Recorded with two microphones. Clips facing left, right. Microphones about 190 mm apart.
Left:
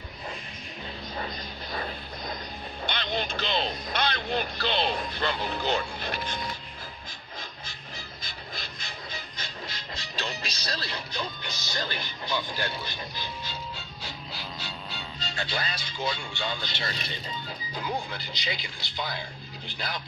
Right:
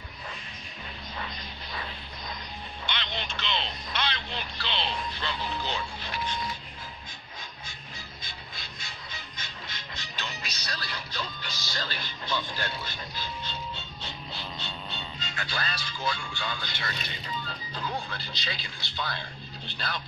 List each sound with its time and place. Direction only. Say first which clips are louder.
1.1 s vehicle: left 3 dB; 40° left (ahead or behind)
2.8 s speech: left 6 dB; 40° left (ahead or behind)
9.4 s music: left 4 dB; 35° left (ahead or behind); by 15.0 s 5° left (ahead or behind)
15.1 s a man's voice: left 4 dB; 30° left (ahead or behind)
17.5 s speech: left 5 dB; 15° left (ahead or behind)